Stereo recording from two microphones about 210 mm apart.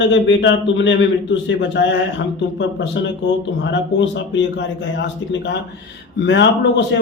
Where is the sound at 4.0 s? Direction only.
60° left (ahead or behind).